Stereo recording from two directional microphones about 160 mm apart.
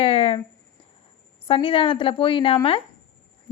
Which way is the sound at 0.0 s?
35° left (ahead or behind).